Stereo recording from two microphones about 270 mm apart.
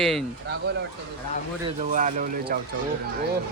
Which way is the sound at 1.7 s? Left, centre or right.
Right.